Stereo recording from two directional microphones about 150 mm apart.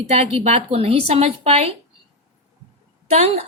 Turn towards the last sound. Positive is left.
turn(degrees=-45)  # may be behind; listen again after turning